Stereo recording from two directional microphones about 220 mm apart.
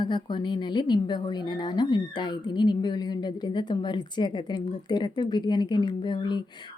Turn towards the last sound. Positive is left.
turn(degrees=20)  # may be behind; listen again after turning